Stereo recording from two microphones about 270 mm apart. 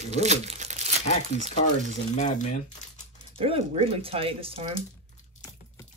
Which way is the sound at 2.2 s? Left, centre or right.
Left.